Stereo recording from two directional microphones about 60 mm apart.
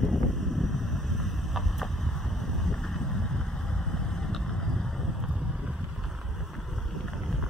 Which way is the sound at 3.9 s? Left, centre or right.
Centre.